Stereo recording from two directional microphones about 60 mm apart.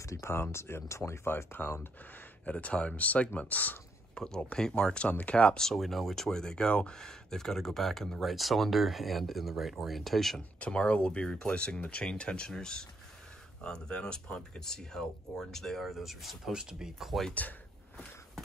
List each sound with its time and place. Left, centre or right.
0.0 s speech: left
2.4 s speech: left
4.1 s speech: centre
5.6 s speech: centre
10.6 s speech: centre
17.3 s speech: left